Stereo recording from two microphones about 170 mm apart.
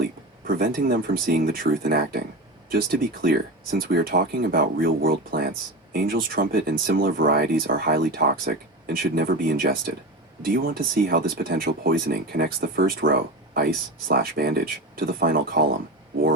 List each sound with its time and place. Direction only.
0.4 s speech: 60° right (ahead or behind)